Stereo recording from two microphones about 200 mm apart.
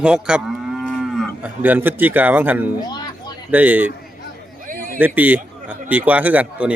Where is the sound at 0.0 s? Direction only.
5° right (ahead or behind).